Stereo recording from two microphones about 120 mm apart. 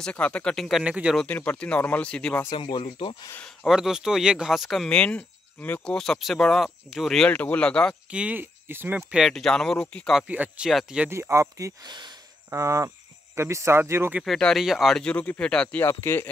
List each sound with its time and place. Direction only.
0.0 s speech: 10° left (ahead or behind)
0.8 s speech: 10° right (ahead or behind)
1.1 s speech: 15° left (ahead or behind)
2.5 s speech: 45° left (ahead or behind)
3.3 s speech: 5° left (ahead or behind)
8.1 s speech: 10° right (ahead or behind)
9.1 s speech: centre (ahead or behind)
10.1 s speech: 10° right (ahead or behind)
11.1 s speech: 25° right (ahead or behind)
11.9 s speech: 40° right (ahead or behind)
12.4 s speech: 25° right (ahead or behind)
14.2 s speech: centre (ahead or behind)
15.8 s speech: 20° left (ahead or behind)